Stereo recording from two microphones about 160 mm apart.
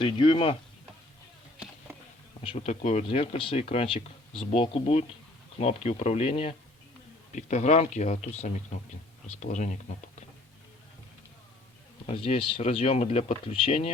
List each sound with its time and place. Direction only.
0.0 s speech: 30° left (ahead or behind)
2.4 s speech: 35° left (ahead or behind)
12.0 s speech: 35° left (ahead or behind)